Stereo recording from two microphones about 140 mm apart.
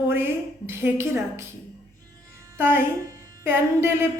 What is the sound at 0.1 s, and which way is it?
Speech, 15° right (ahead or behind).